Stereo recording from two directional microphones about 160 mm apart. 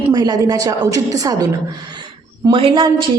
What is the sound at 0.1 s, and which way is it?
A woman's voice, 25° right (ahead or behind).